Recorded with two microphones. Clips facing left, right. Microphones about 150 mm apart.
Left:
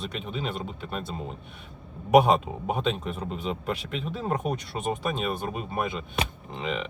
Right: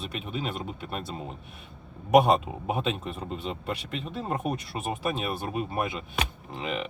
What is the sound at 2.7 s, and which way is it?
Speech, centre (ahead or behind).